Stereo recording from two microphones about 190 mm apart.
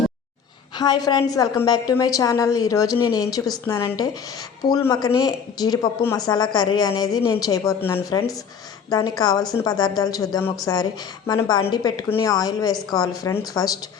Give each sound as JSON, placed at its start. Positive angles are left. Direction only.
{"t": 0.8, "sound": "a woman's voice", "side_deg": 20}